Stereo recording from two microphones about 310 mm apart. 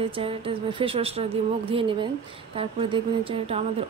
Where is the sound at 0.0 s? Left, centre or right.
Centre.